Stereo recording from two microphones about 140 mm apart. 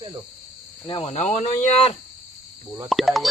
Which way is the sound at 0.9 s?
50° left (ahead or behind).